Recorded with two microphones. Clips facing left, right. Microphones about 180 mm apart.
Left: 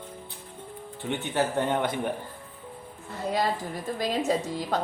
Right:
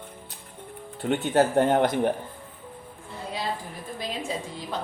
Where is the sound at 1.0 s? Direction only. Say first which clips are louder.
Right 6 dB; 60° right (ahead or behind).